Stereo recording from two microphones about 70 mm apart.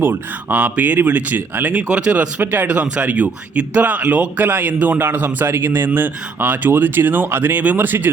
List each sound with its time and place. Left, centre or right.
0.0 s speech: right
2.4 s speech: right